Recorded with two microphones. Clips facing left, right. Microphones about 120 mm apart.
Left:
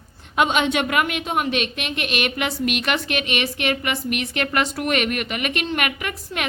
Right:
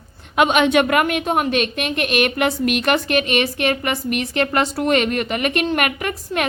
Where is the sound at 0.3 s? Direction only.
60° right (ahead or behind).